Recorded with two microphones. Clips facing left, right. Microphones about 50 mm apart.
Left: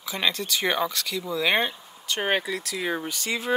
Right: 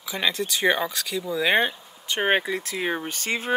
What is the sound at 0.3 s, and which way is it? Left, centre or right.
Speech, centre.